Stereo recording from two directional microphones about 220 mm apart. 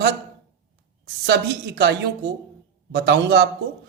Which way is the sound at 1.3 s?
50° right (ahead or behind).